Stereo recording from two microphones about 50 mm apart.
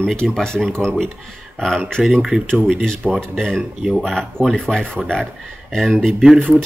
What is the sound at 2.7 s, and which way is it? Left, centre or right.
Speech, centre.